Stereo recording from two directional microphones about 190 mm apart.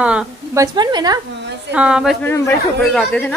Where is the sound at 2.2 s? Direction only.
10° left (ahead or behind).